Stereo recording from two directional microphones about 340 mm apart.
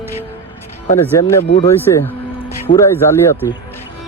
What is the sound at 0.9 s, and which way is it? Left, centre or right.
Speech, centre.